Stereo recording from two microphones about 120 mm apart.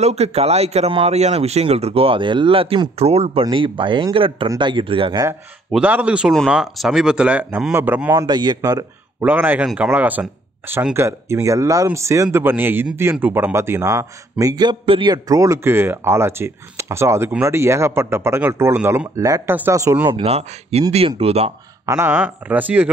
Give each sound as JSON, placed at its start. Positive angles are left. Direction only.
{"t": 0.0, "sound": "speech", "side_deg": -60}
{"t": 3.4, "sound": "speech", "side_deg": -45}
{"t": 5.8, "sound": "speech", "side_deg": -10}
{"t": 8.3, "sound": "a sound", "side_deg": -35}
{"t": 8.5, "sound": "speech", "side_deg": -25}
{"t": 9.2, "sound": "speech", "side_deg": -15}
{"t": 14.4, "sound": "a sound", "side_deg": -35}
{"t": 14.9, "sound": "speech", "side_deg": -45}
{"t": 15.2, "sound": "speech", "side_deg": -25}
{"t": 19.1, "sound": "speech", "side_deg": -30}
{"t": 20.2, "sound": "speech", "side_deg": -60}
{"t": 21.8, "sound": "speech", "side_deg": -20}